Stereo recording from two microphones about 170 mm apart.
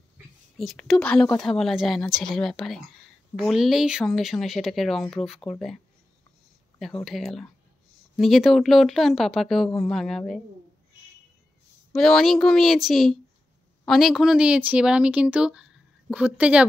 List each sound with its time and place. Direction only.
0.6 s speech: centre (ahead or behind)
6.8 s speech: centre (ahead or behind)
11.9 s a woman's voice: centre (ahead or behind)